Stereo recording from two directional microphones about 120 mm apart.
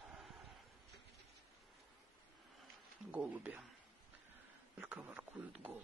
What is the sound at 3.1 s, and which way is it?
Speech, 15° right (ahead or behind).